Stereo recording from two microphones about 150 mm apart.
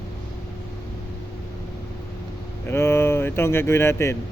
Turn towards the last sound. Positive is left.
turn(degrees=15)  # may be behind; listen again after turning